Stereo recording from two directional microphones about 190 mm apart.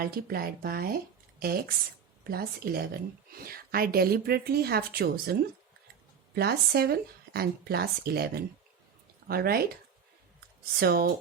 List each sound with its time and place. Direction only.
0.0 s speech: 50° right (ahead or behind)
10.8 s speech: 55° right (ahead or behind)